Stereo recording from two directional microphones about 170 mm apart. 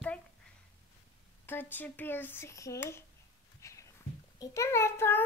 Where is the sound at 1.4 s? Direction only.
10° left (ahead or behind).